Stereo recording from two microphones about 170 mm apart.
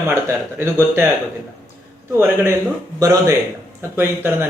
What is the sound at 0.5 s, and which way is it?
Speech, 15° right (ahead or behind).